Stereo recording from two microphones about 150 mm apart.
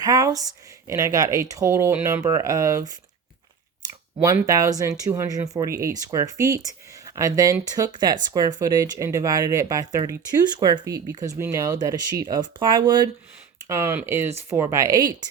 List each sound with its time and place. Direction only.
0.0 s a sound: 25° right (ahead or behind)
0.9 s speech: 20° right (ahead or behind)
13.7 s speech: 20° right (ahead or behind)